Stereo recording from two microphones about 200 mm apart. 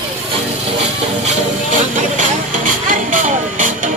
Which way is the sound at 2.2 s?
40° right (ahead or behind).